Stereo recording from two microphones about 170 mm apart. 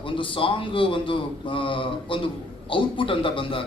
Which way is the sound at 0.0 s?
30° left (ahead or behind).